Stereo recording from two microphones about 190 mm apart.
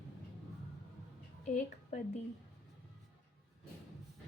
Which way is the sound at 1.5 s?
40° left (ahead or behind).